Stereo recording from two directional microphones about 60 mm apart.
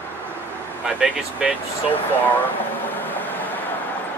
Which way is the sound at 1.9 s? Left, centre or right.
Left.